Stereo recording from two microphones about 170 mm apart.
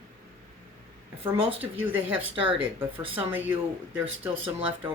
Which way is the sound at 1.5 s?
10° right (ahead or behind).